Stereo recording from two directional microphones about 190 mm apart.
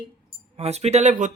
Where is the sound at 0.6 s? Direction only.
35° right (ahead or behind).